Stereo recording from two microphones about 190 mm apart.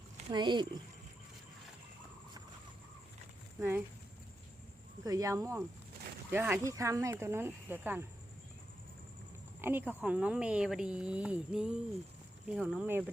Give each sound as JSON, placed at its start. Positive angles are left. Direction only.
{"t": 0.3, "sound": "speech", "side_deg": -25}
{"t": 3.6, "sound": "speech", "side_deg": -10}
{"t": 5.0, "sound": "speech", "side_deg": -20}
{"t": 9.6, "sound": "speech", "side_deg": -10}